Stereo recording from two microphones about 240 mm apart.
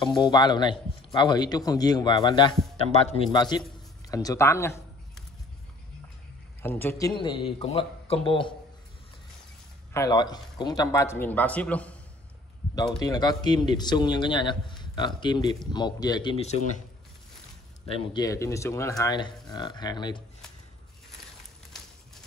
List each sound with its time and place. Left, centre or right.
0.2 s a man's voice: centre
6.6 s a man's voice: centre
9.9 s a man's voice: centre
13.0 s a man's voice: centre
17.8 s a man's voice: left